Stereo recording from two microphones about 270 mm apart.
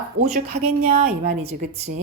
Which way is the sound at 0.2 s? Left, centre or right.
Right.